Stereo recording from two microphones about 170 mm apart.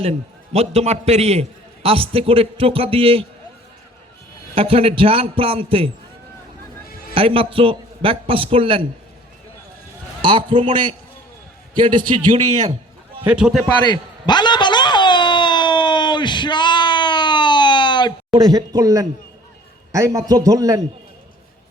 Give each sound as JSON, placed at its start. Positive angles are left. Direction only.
{"t": 0.0, "sound": "a man's voice", "side_deg": -35}
{"t": 4.5, "sound": "a man's voice", "side_deg": -35}
{"t": 7.1, "sound": "a man's voice", "side_deg": -35}
{"t": 10.2, "sound": "a man's voice", "side_deg": -30}
{"t": 13.2, "sound": "a man's voice", "side_deg": -5}
{"t": 13.9, "sound": "a sound", "side_deg": 25}
{"t": 18.3, "sound": "a man's voice", "side_deg": -20}